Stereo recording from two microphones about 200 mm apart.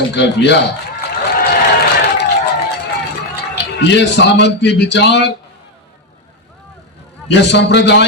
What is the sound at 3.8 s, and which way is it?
A man's voice, 60° left (ahead or behind).